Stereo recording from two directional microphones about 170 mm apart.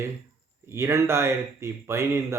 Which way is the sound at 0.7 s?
15° right (ahead or behind).